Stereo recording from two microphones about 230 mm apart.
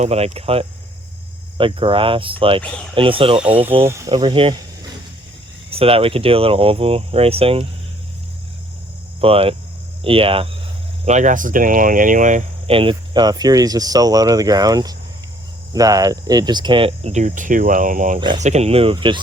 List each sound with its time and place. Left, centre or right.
0.0 s speech: right
3.8 s speech: centre
5.7 s speech: right
9.2 s speech: right